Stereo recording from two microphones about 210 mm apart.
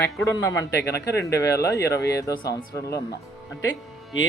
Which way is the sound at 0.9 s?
50° left (ahead or behind).